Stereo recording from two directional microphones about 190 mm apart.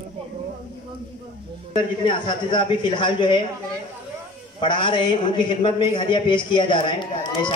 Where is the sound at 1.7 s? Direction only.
25° left (ahead or behind).